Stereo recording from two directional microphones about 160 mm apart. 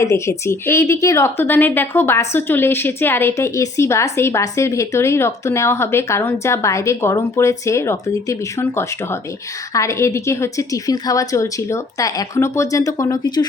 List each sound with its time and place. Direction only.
0.0 s a woman's voice: 15° left (ahead or behind)